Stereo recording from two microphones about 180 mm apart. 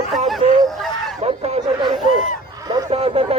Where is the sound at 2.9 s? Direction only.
35° right (ahead or behind).